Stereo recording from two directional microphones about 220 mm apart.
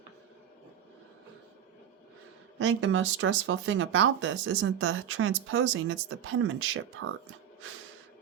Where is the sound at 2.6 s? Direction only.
60° right (ahead or behind).